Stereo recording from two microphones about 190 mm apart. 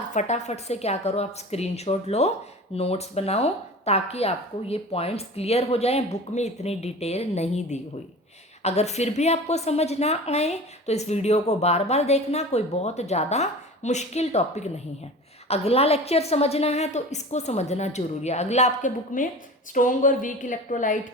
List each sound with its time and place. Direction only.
0.1 s a woman's voice: 40° left (ahead or behind)